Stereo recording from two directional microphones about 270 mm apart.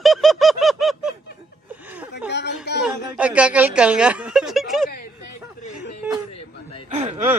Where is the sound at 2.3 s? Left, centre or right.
Left.